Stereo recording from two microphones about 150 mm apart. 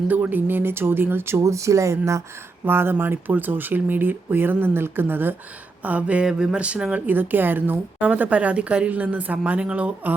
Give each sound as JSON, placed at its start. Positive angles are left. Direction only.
{"t": 0.1, "sound": "speech", "side_deg": -10}